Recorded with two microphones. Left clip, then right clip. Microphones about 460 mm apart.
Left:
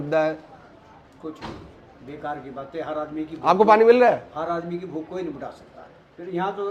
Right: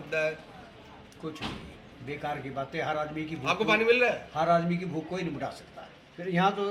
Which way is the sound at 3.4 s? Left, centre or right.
Left.